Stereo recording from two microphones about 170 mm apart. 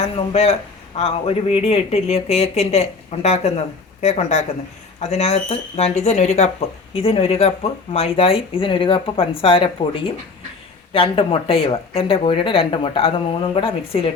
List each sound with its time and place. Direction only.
0.0 s speech: 40° left (ahead or behind)